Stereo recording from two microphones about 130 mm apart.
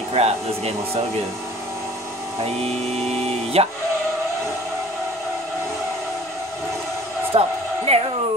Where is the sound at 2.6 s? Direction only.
50° right (ahead or behind).